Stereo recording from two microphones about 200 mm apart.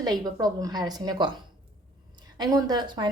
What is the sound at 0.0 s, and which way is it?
A woman's voice, 20° right (ahead or behind).